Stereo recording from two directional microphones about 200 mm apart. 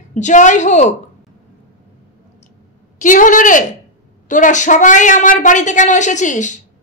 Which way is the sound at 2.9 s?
40° left (ahead or behind).